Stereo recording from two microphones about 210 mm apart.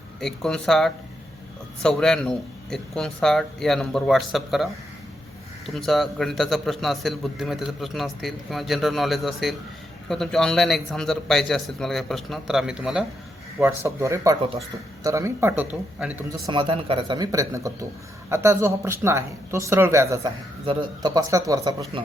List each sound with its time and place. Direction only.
0.2 s a man's voice: centre (ahead or behind)
13.6 s speech: 15° right (ahead or behind)
16.5 s speech: 25° right (ahead or behind)